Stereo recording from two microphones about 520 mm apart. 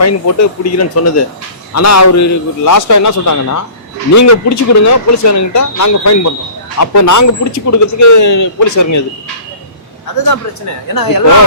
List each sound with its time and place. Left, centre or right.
0.0 s speech: left
10.9 s speech: left